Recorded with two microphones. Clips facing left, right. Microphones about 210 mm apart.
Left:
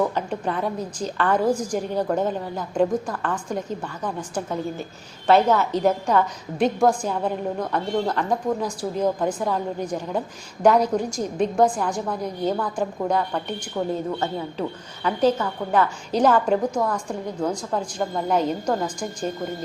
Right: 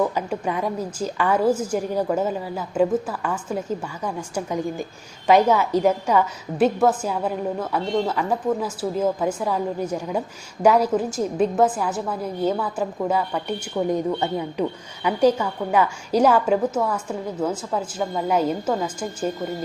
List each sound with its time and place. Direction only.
0.1 s a woman's voice: 10° right (ahead or behind)